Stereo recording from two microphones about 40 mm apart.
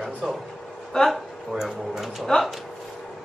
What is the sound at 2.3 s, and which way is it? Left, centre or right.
Speech, centre.